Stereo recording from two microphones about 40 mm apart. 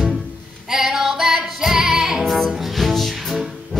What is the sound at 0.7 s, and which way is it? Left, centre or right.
Music, centre.